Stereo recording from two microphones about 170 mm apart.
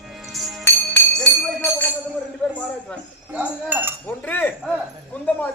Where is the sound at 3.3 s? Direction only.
10° right (ahead or behind).